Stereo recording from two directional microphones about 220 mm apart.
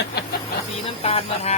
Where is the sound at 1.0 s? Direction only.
25° left (ahead or behind).